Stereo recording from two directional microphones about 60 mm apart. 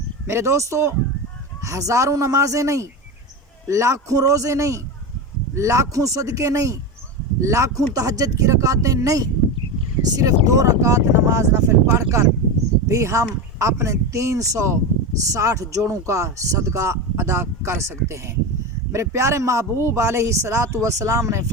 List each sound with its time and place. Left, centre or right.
0.3 s a man's voice: right
7.9 s speech: right
10.0 s a man's voice: right
20.8 s speech: right